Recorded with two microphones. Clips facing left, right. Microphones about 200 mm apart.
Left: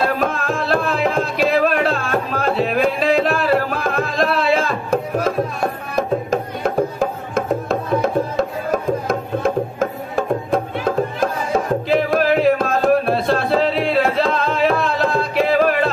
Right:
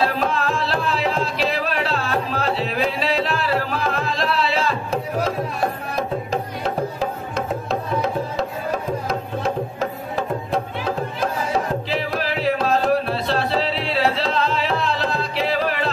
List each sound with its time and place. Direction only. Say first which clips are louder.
0.0 s music: left 1 dB; 50° left (ahead or behind)